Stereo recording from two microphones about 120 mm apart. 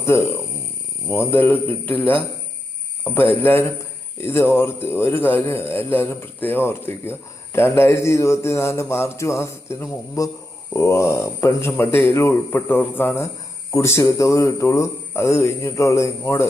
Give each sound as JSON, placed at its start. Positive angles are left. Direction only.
{"t": 0.0, "sound": "a man's voice", "side_deg": 20}
{"t": 3.4, "sound": "a man's voice", "side_deg": 15}